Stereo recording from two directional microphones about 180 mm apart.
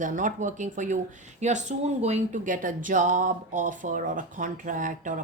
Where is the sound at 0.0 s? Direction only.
45° right (ahead or behind).